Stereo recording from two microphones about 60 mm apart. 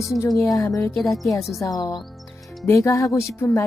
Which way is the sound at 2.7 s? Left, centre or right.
Left.